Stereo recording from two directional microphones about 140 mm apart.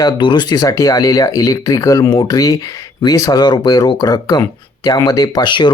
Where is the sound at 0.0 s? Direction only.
30° left (ahead or behind).